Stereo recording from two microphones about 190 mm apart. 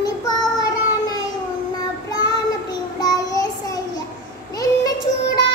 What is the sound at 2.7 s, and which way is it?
Child singing, 20° left (ahead or behind).